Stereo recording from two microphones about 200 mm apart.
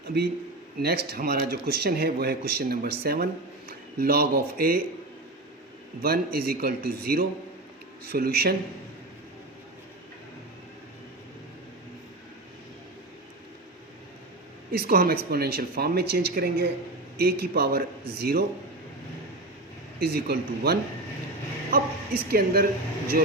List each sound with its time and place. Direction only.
0.8 s speech: 55° right (ahead or behind)
6.0 s speech: 50° right (ahead or behind)
14.7 s speech: 50° right (ahead or behind)
20.0 s speech: 50° right (ahead or behind)